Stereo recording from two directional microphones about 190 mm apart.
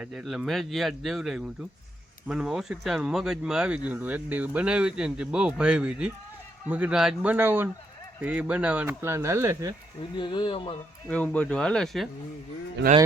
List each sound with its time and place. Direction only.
0.0 s speech: centre (ahead or behind)
10.2 s speech: 25° left (ahead or behind)
11.1 s speech: 5° left (ahead or behind)